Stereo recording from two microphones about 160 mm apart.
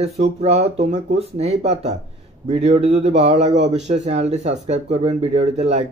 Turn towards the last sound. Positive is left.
turn(degrees=-45)  # may be behind; listen again after turning